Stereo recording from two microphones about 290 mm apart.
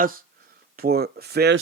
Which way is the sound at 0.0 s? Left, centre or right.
Right.